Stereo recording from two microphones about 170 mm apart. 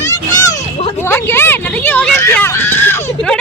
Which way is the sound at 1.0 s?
15° left (ahead or behind).